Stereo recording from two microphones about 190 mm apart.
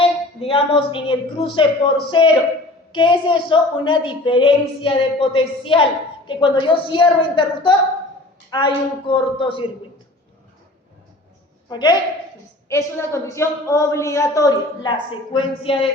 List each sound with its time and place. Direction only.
0.0 s a woman's voice: 30° left (ahead or behind)
11.7 s a woman's voice: 25° left (ahead or behind)